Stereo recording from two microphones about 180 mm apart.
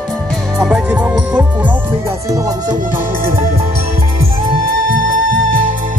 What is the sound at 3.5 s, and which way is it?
Music, 35° right (ahead or behind).